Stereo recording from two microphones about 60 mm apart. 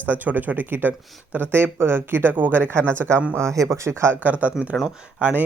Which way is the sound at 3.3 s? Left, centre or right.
Right.